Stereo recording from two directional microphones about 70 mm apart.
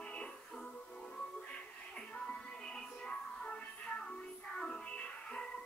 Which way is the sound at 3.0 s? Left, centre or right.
Centre.